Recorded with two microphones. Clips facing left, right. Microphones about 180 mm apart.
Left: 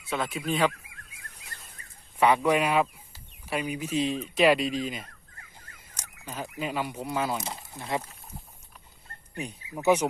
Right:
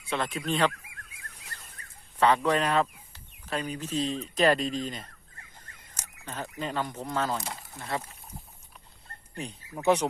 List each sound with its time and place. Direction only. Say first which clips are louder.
0.1 s speech: even; 5° left (ahead or behind)
1.8 s a sound: right 1 dB; 25° left (ahead or behind)
2.1 s speech: left 1 dB; 10° left (ahead or behind)
7.3 s speech: left 1 dB; 20° left (ahead or behind)
9.4 s speech: left 1 dB; 5° left (ahead or behind)